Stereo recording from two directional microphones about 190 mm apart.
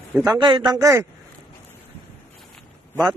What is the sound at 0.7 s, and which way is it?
Speech, 15° right (ahead or behind).